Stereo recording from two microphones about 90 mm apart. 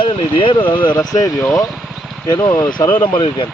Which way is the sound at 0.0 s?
75° left (ahead or behind).